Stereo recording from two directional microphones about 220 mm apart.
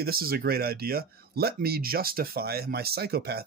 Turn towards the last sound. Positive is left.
turn(degrees=-45)  # may be behind; listen again after turning